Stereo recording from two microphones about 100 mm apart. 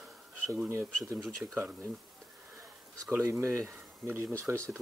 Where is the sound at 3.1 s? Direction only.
25° right (ahead or behind).